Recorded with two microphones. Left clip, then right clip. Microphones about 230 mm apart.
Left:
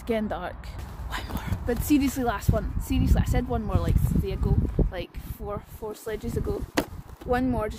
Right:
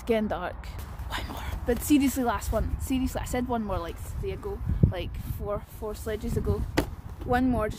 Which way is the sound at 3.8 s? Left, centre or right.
Left.